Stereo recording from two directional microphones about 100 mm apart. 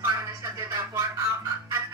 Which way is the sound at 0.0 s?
25° right (ahead or behind).